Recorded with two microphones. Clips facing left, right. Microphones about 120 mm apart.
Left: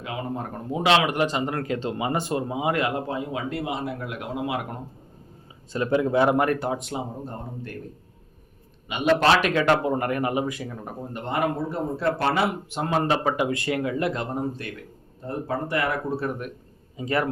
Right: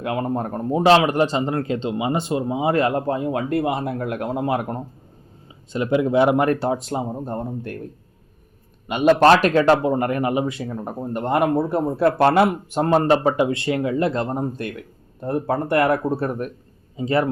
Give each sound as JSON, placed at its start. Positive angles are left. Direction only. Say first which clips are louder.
{"t": 0.0, "sound": "speech", "louder": "right 7 dB", "side_deg": -55}
{"t": 5.7, "sound": "speech", "louder": "right 3 dB", "side_deg": -20}
{"t": 7.3, "sound": "speech", "louder": "right 8 dB", "side_deg": -55}
{"t": 8.9, "sound": "speech", "louder": "right 6 dB", "side_deg": -45}
{"t": 9.8, "sound": "speech", "louder": "right 4 dB", "side_deg": -25}
{"t": 11.1, "sound": "speech", "louder": "right 7 dB", "side_deg": -50}
{"t": 14.6, "sound": "speech", "louder": "right 6 dB", "side_deg": -55}
{"t": 17.0, "sound": "speech", "louder": "right 5 dB", "side_deg": -25}